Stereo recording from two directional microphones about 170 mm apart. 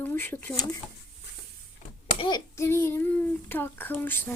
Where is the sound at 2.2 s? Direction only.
25° left (ahead or behind).